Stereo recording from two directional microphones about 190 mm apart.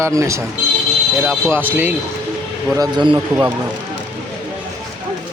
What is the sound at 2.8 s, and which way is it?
Speech, 25° right (ahead or behind).